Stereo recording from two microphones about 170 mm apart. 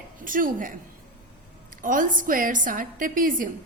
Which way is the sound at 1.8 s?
50° right (ahead or behind).